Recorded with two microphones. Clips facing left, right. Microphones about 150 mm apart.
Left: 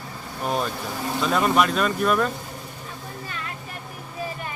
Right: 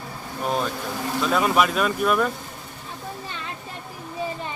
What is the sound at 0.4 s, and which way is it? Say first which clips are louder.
A man's voice: even; centre (ahead or behind).